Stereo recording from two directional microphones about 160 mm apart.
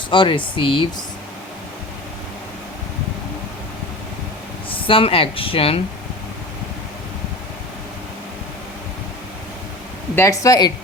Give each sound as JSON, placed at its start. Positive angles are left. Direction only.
{"t": 0.1, "sound": "speech", "side_deg": 30}
{"t": 4.7, "sound": "speech", "side_deg": 35}
{"t": 10.2, "sound": "speech", "side_deg": 20}